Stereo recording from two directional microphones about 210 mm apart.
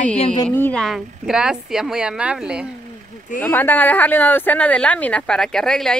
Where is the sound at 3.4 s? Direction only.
10° left (ahead or behind).